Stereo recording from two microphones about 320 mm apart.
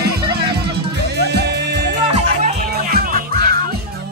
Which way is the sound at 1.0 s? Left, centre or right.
Right.